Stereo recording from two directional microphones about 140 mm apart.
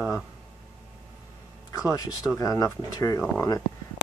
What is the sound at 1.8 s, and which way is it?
Speech, 25° left (ahead or behind).